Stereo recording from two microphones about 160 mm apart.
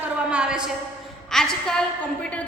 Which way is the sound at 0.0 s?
5° right (ahead or behind).